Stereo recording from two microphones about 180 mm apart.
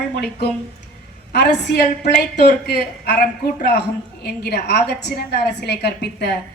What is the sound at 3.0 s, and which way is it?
A woman's voice, 65° left (ahead or behind).